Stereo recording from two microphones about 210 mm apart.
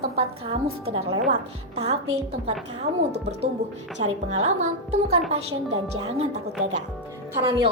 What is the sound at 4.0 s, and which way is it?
A woman's voice, 30° right (ahead or behind).